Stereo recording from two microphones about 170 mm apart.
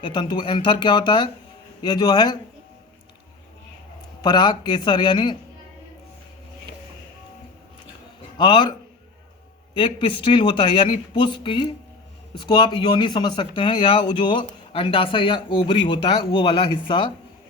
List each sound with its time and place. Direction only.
0.0 s speech: 25° left (ahead or behind)
4.2 s speech: 25° left (ahead or behind)
8.4 s speech: 30° left (ahead or behind)
9.7 s speech: 30° left (ahead or behind)